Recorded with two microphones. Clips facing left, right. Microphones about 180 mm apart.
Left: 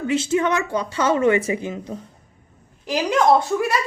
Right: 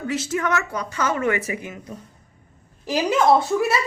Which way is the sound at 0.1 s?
25° left (ahead or behind).